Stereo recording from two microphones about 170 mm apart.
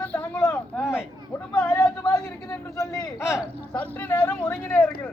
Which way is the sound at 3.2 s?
5° right (ahead or behind).